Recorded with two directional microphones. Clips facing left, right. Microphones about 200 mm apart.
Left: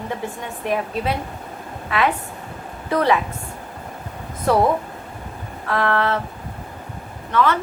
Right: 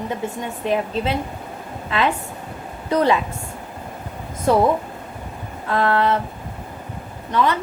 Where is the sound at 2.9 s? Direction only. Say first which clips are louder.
Right 1 dB; 20° right (ahead or behind).